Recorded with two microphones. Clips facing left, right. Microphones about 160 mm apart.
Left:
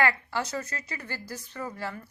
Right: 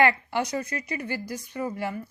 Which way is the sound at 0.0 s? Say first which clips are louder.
Right 4 dB; 20° right (ahead or behind).